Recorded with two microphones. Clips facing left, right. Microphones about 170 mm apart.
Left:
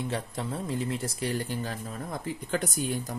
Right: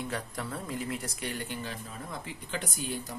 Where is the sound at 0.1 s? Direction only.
25° left (ahead or behind).